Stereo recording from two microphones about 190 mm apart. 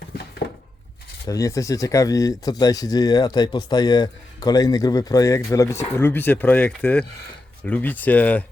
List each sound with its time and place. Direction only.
1.3 s speech: 15° left (ahead or behind)